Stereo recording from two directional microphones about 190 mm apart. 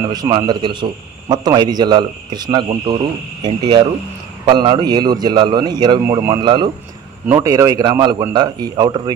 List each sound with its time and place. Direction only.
0.1 s a man's voice: 20° right (ahead or behind)